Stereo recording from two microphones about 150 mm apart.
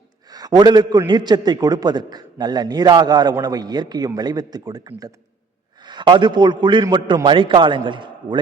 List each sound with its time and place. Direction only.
0.3 s a man's voice: 25° right (ahead or behind)
5.8 s a man's voice: 30° right (ahead or behind)